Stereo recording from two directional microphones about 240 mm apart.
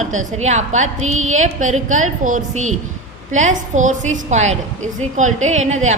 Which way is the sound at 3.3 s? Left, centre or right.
Right.